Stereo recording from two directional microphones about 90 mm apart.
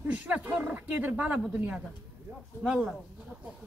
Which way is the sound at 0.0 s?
15° right (ahead or behind).